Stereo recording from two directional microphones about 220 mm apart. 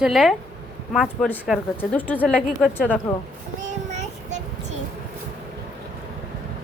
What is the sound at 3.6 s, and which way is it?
Child singing, 30° right (ahead or behind).